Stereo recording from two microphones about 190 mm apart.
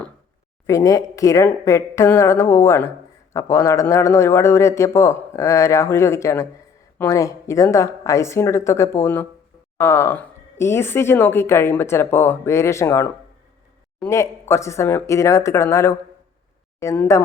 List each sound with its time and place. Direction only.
0.7 s a woman's voice: 20° left (ahead or behind)